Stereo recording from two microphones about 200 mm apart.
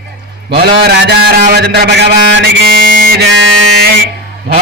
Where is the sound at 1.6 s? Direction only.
55° right (ahead or behind).